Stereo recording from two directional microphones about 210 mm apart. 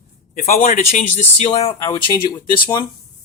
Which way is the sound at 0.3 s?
40° left (ahead or behind).